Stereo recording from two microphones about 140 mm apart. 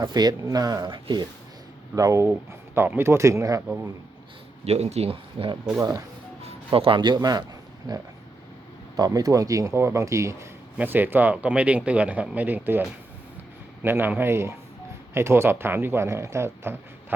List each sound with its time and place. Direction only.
0.0 s speech: 30° right (ahead or behind)
2.0 s speech: 20° right (ahead or behind)
4.6 s a man's voice: 50° right (ahead or behind); by 12.8 s 15° right (ahead or behind)
13.8 s speech: 15° right (ahead or behind)